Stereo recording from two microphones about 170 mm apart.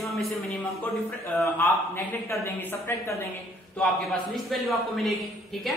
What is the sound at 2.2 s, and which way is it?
Speech, 15° left (ahead or behind).